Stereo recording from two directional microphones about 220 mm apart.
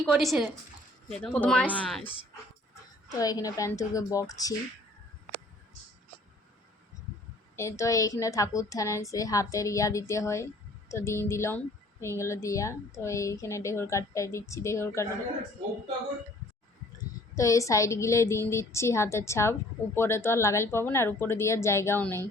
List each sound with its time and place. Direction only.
0.0 s speech: centre (ahead or behind)
3.2 s a woman's voice: 15° left (ahead or behind)
7.5 s a woman's voice: 15° left (ahead or behind)
17.3 s a woman's voice: 15° left (ahead or behind)